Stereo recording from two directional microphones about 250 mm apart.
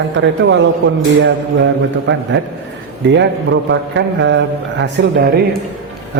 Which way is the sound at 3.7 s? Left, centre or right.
Right.